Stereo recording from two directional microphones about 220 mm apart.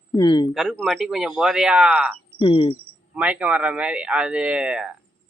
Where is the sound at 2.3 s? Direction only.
25° left (ahead or behind).